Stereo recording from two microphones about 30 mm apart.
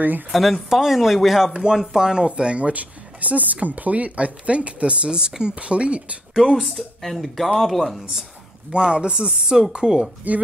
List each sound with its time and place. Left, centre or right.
0.3 s speech: centre
1.5 s speech: right
1.8 s speech: centre
2.0 s speech: right
6.4 s speech: centre
6.7 s speech: centre
8.7 s speech: right
10.3 s speech: right